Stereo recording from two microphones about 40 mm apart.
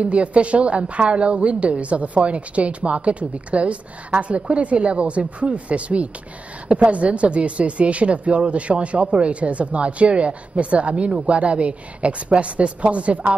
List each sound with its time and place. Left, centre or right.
0.0 s a woman's voice: right